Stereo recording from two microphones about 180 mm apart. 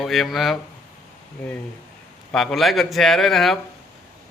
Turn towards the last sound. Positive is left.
turn(degrees=0)  # may be behind; listen again after turning